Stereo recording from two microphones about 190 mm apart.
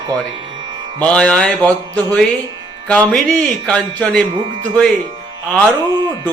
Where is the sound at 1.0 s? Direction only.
5° left (ahead or behind).